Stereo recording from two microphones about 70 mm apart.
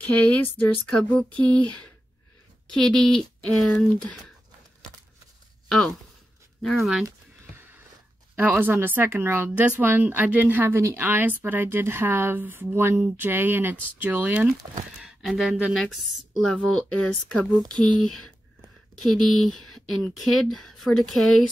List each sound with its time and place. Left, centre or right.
0.2 s speech: left
2.7 s speech: centre
5.7 s speech: centre
6.8 s speech: centre
8.4 s speech: right
15.2 s speech: centre
17.6 s speech: right
19.0 s speech: centre